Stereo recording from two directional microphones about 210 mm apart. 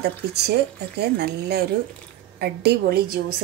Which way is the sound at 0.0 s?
50° right (ahead or behind).